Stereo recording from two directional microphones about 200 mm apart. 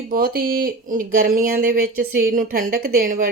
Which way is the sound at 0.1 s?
45° right (ahead or behind).